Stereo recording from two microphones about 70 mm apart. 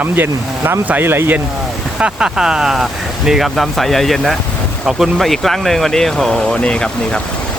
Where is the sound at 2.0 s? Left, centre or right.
Centre.